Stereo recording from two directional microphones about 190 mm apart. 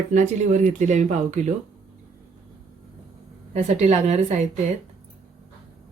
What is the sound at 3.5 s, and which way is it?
Speech, 35° right (ahead or behind).